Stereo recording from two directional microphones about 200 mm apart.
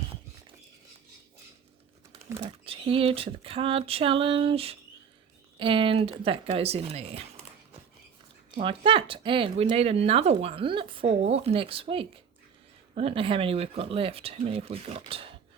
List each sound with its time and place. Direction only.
2.4 s speech: 25° right (ahead or behind)
8.6 s speech: 25° right (ahead or behind)